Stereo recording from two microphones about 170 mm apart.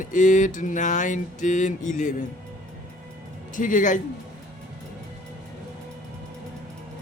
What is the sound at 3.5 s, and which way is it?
Speech, 50° left (ahead or behind).